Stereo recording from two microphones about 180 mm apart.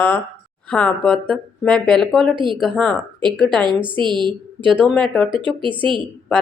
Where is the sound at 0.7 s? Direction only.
5° left (ahead or behind).